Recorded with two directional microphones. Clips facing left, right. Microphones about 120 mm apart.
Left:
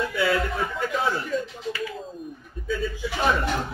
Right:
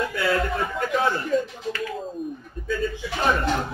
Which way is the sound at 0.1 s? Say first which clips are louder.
Even; centre (ahead or behind).